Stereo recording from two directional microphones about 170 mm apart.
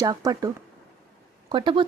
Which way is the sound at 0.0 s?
20° right (ahead or behind).